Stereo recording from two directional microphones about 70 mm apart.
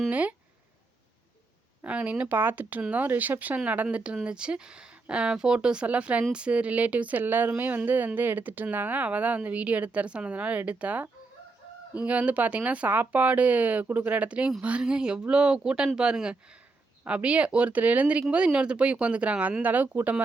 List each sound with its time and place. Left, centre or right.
0.1 s speech: right
1.8 s speech: right